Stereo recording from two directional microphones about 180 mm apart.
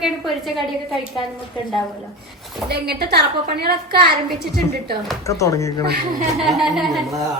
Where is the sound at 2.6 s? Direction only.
65° right (ahead or behind).